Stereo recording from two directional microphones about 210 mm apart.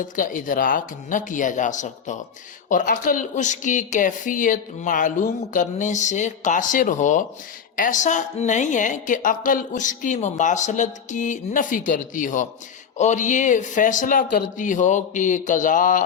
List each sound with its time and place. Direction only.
0.0 s a woman's voice: 40° left (ahead or behind)